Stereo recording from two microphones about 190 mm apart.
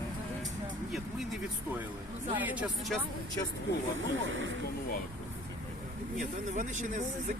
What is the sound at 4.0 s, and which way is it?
Speech, 85° right.